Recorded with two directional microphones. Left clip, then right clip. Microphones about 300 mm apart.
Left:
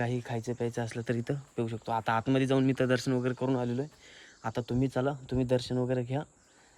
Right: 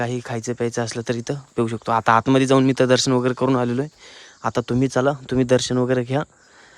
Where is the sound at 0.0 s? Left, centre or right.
Centre.